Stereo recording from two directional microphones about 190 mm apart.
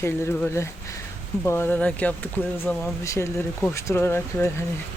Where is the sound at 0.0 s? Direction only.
10° left (ahead or behind).